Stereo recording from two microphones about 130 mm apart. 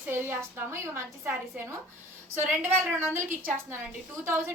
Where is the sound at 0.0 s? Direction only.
15° right (ahead or behind).